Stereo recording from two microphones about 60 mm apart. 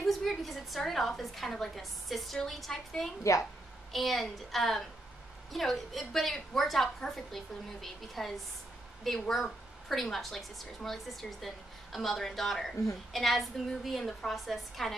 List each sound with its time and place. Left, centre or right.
0.0 s a woman's voice: centre
3.3 s a woman's voice: left
3.9 s a woman's voice: centre